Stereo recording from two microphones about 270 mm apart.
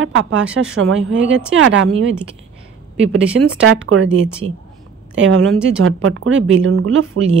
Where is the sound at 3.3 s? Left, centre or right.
Right.